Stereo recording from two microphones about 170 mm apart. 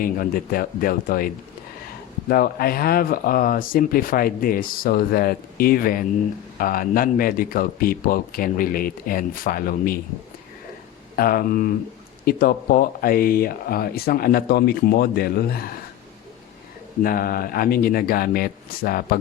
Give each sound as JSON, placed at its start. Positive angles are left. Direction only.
{"t": 0.0, "sound": "speech", "side_deg": 60}
{"t": 2.3, "sound": "speech", "side_deg": 60}
{"t": 11.2, "sound": "speech", "side_deg": 60}
{"t": 17.0, "sound": "speech", "side_deg": 60}